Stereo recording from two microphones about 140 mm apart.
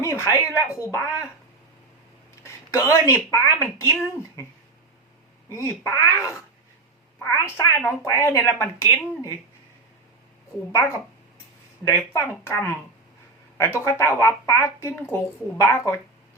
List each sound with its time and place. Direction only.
0.0 s speech: 20° left (ahead or behind)
2.4 s a sound: 20° left (ahead or behind)
3.2 s speech: 20° left (ahead or behind)
5.5 s a woman's voice: 20° left (ahead or behind)
11.9 s speech: 20° left (ahead or behind)